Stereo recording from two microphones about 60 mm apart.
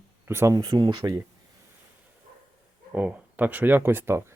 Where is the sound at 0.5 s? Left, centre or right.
Right.